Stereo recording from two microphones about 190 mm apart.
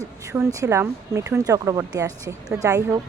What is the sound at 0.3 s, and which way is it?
Speech, 15° right (ahead or behind).